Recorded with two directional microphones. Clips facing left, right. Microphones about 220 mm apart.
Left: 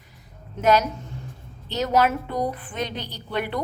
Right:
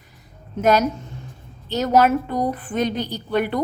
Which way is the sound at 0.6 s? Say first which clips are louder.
Right 2 dB; 45° right (ahead or behind).